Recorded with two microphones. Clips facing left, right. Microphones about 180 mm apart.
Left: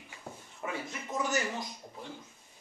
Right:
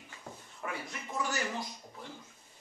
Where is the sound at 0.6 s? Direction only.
20° left (ahead or behind).